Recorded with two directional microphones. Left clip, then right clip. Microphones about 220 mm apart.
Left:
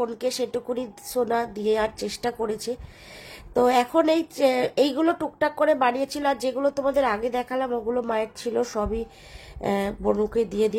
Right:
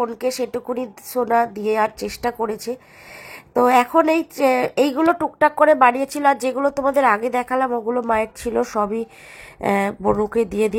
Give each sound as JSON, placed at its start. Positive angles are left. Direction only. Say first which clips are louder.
{"t": 0.0, "sound": "speech", "louder": "right 4 dB", "side_deg": -5}
{"t": 0.7, "sound": "speech", "louder": "right 4 dB", "side_deg": -15}
{"t": 1.4, "sound": "speech", "louder": "right 5 dB", "side_deg": 0}
{"t": 3.9, "sound": "speech", "louder": "right 4 dB", "side_deg": 0}
{"t": 4.9, "sound": "speech", "louder": "right 6 dB", "side_deg": -15}
{"t": 10.5, "sound": "speech", "louder": "right 3 dB", "side_deg": -35}